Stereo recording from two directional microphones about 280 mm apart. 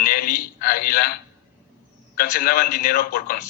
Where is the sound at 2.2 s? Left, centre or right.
Left.